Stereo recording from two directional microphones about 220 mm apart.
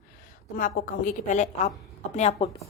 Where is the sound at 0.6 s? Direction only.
35° left (ahead or behind).